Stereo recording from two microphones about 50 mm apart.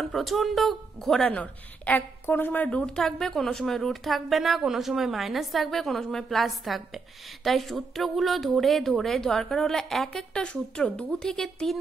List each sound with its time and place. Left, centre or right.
0.0 s a woman's voice: centre
1.3 s a woman's voice: left
2.2 s a woman's voice: left
3.0 s a woman's voice: centre